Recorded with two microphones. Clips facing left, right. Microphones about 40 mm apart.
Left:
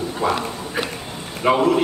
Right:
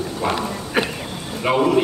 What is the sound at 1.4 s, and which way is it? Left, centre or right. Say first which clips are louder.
Speech: even; centre.